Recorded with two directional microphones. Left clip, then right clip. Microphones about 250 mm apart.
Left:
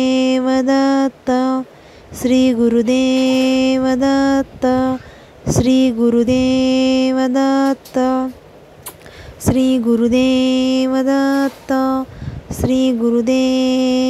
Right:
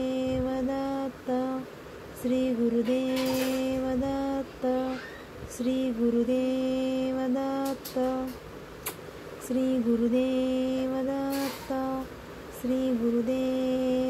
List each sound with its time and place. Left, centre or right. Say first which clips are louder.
0.0 s mantra: left 14 dB; left
9.6 s mantra: left 11 dB; left